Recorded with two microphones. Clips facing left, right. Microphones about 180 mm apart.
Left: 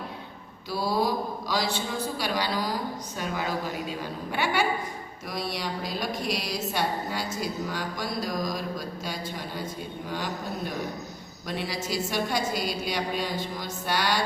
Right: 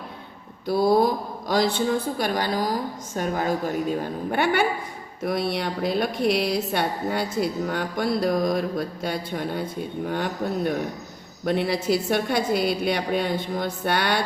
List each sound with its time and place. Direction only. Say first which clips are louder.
0.7 s a man's voice: right 7 dB; 55° right (ahead or behind)